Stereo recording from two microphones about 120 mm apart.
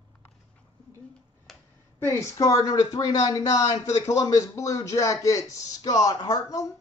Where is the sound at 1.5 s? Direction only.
Centre (ahead or behind).